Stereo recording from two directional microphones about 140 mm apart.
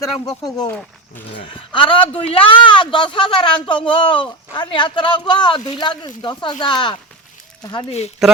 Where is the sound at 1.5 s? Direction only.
35° left (ahead or behind).